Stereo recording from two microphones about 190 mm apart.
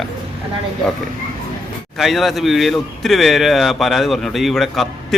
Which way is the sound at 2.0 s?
Centre (ahead or behind).